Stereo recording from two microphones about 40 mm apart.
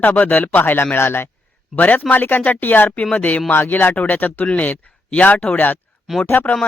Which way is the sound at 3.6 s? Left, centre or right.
Left.